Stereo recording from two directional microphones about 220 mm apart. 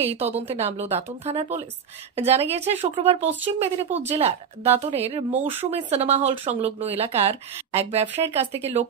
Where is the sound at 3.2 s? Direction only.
10° right (ahead or behind).